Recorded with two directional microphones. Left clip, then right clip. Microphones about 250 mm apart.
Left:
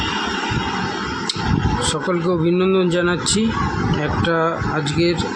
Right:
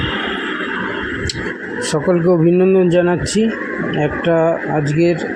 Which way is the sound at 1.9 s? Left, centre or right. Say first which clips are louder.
Right 9 dB; centre.